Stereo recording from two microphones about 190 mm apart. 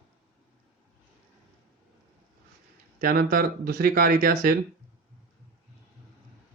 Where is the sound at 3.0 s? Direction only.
50° right (ahead or behind).